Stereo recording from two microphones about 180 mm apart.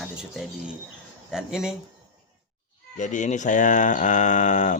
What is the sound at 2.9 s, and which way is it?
Speech, 45° left (ahead or behind).